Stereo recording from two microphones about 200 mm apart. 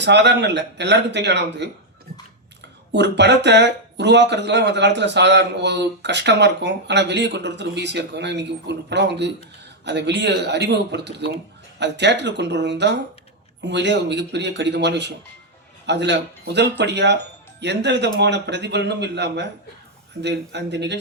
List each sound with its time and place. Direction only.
0.0 s speech: 60° right (ahead or behind)
2.9 s speech: 60° right (ahead or behind)